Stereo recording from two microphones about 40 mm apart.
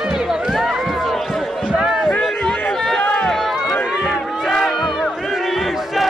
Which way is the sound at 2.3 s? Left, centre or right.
Centre.